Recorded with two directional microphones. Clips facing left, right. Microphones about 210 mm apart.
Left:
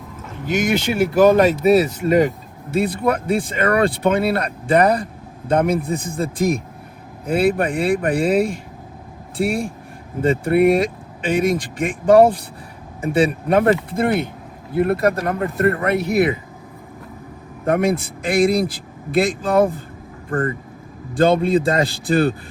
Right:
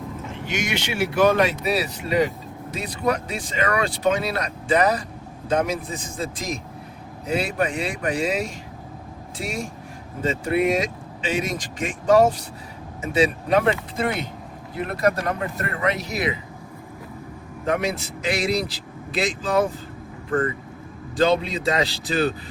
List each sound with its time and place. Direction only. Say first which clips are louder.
0.4 s speech: left 9 dB; 40° left (ahead or behind)
17.7 s speech: left 6 dB; 55° left (ahead or behind)
21.2 s speech: left 5 dB; 55° left (ahead or behind)